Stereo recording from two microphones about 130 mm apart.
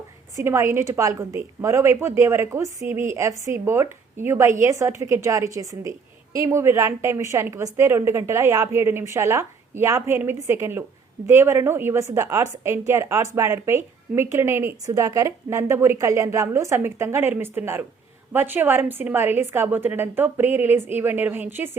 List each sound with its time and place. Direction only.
0.3 s a woman's voice: 20° right (ahead or behind)